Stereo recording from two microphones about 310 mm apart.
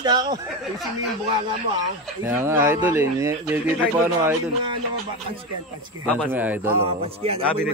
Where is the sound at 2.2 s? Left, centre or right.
Centre.